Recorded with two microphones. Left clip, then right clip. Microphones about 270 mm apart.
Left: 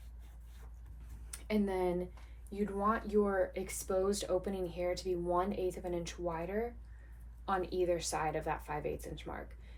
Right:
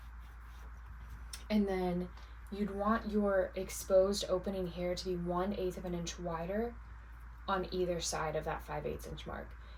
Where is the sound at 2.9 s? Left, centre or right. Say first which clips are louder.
Right 1 dB; left.